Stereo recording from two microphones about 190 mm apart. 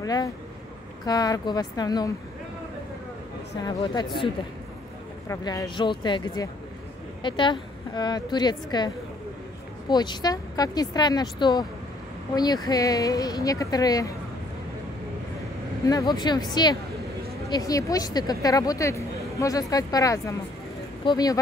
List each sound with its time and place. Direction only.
0.0 s speech: 20° left (ahead or behind)
3.6 s speech: 20° left (ahead or behind)
5.3 s speech: 20° left (ahead or behind)
12.6 s speech: 20° left (ahead or behind)
15.9 s speech: 20° left (ahead or behind)